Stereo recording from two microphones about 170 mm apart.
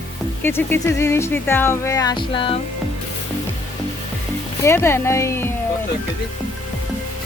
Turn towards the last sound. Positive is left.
turn(degrees=15)  # may be behind; listen again after turning